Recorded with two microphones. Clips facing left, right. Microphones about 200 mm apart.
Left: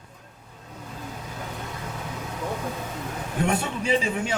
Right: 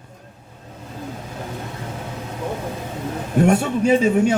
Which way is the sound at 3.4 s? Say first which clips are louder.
Right 9 dB; 45° right (ahead or behind).